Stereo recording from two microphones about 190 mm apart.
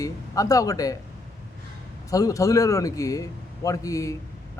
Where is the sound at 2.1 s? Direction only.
20° left (ahead or behind).